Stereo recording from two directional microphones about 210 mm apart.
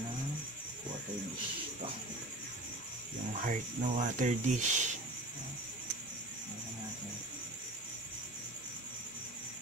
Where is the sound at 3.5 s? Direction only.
35° right (ahead or behind).